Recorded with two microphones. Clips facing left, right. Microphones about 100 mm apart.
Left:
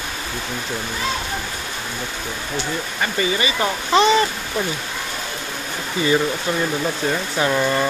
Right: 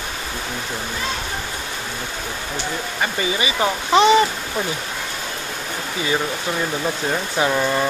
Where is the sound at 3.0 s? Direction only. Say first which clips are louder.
Left 1 dB; 15° right (ahead or behind).